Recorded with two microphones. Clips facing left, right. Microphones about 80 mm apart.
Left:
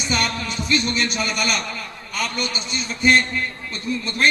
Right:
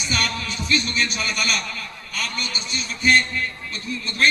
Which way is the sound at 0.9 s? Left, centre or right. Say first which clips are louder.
Left 2 dB; left.